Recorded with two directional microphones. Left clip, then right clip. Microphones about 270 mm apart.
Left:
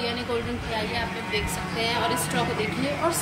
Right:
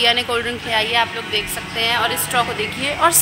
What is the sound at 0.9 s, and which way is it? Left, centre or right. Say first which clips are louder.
Speech: right 9 dB; centre.